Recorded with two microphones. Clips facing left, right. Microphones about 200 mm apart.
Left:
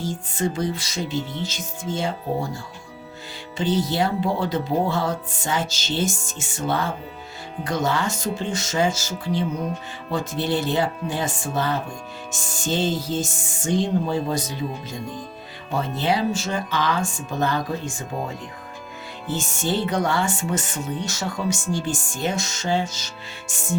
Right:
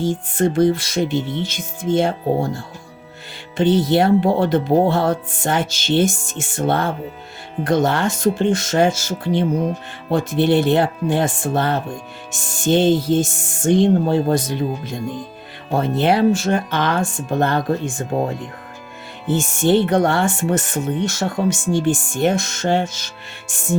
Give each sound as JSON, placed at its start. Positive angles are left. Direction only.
{"t": 0.0, "sound": "speech", "side_deg": -55}
{"t": 3.6, "sound": "speech", "side_deg": -60}